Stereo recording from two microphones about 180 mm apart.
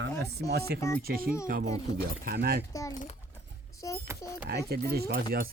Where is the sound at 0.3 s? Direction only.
65° right (ahead or behind).